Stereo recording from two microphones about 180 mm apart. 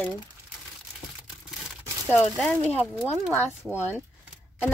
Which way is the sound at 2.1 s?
5° left (ahead or behind).